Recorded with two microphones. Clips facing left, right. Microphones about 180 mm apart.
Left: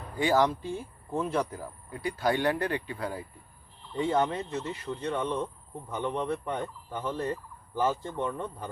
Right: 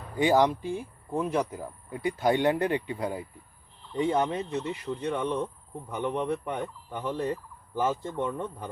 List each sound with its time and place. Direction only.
0.2 s speech: 15° right (ahead or behind)